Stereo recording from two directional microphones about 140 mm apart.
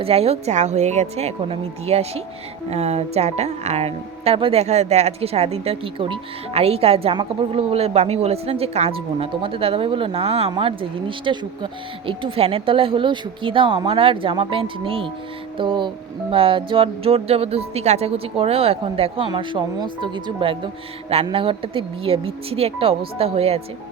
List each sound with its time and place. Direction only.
0.0 s a woman's voice: 45° right (ahead or behind)